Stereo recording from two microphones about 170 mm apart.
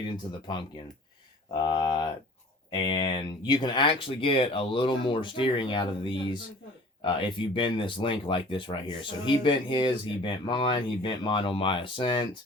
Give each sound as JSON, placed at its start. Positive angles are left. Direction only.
{"t": 1.6, "sound": "speech", "side_deg": 25}